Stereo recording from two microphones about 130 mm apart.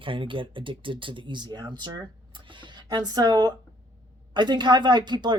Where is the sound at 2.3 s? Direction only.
40° right (ahead or behind).